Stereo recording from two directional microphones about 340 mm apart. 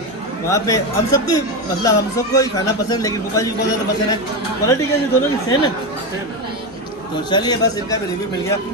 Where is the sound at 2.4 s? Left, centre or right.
Centre.